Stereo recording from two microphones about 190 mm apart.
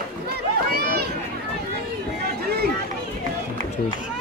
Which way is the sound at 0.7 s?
55° right (ahead or behind).